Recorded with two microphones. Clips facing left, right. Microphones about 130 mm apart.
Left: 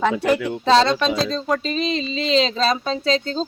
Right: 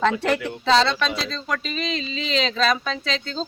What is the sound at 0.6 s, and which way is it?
Speech, 40° left (ahead or behind).